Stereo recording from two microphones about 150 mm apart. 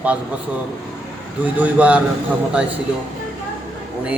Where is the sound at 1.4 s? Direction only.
10° right (ahead or behind).